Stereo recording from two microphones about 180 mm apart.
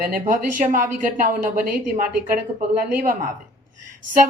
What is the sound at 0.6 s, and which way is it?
Speech, 50° right (ahead or behind).